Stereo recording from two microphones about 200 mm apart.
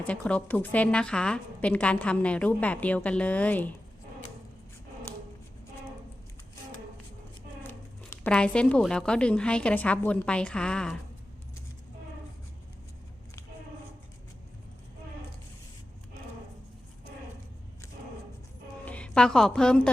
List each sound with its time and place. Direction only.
0.0 s a woman's voice: 5° left (ahead or behind)
8.2 s a woman's voice: 5° left (ahead or behind)
18.9 s a woman's voice: 5° left (ahead or behind)